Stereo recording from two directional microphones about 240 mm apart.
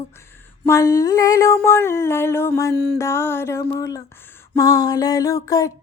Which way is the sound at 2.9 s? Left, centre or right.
Centre.